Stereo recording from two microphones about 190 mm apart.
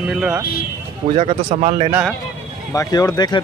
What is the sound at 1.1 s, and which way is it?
Speech, 35° right (ahead or behind).